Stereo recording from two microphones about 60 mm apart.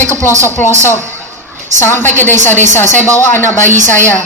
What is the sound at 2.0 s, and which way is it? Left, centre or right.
Speech, left.